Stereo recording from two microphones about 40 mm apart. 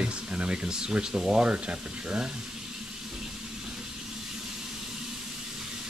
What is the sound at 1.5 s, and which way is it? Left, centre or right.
Speech, right.